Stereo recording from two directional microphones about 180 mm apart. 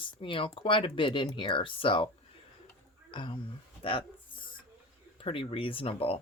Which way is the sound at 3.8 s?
30° left (ahead or behind).